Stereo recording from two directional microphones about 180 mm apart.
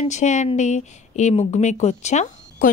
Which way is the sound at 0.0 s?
40° left (ahead or behind).